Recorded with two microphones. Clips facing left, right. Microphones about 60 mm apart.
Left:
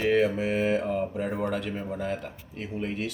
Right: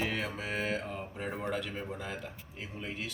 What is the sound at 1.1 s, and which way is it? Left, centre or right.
Speech, centre.